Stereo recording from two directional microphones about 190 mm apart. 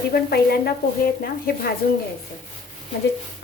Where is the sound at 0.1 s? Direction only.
55° left (ahead or behind).